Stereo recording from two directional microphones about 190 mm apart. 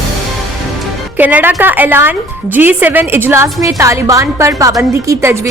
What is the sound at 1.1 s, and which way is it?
Speech, 10° right (ahead or behind).